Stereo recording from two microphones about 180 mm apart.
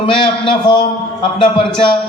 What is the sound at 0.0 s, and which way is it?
A man's voice, 25° left (ahead or behind).